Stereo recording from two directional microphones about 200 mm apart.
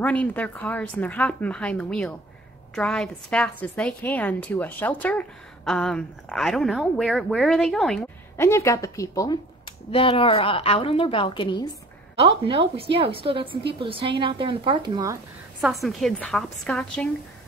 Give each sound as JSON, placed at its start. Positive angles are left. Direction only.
{"t": 0.0, "sound": "a woman's voice", "side_deg": 5}
{"t": 8.4, "sound": "a woman's voice", "side_deg": 15}
{"t": 9.8, "sound": "a woman's voice", "side_deg": 25}
{"t": 12.2, "sound": "a woman's voice", "side_deg": -30}
{"t": 15.6, "sound": "speech", "side_deg": 0}